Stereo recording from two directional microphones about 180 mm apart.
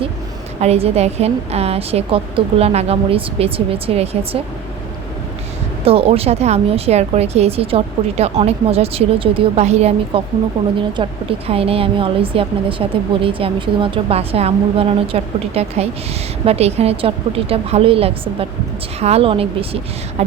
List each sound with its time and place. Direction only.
0.6 s a woman's voice: 35° right (ahead or behind)
5.8 s a woman's voice: 30° right (ahead or behind)